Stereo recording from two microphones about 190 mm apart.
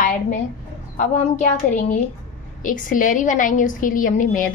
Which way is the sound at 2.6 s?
45° left (ahead or behind).